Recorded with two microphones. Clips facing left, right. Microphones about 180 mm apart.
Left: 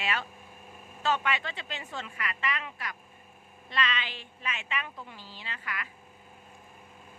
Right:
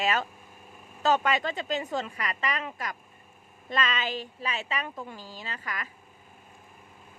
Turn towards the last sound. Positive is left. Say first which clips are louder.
# right 3 dB
turn(degrees=-40)  # may be behind; listen again after turning